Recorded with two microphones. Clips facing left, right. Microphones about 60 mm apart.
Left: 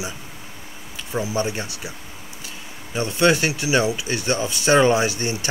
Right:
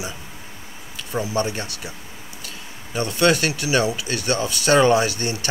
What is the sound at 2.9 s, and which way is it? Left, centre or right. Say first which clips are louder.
Speech: even; centre.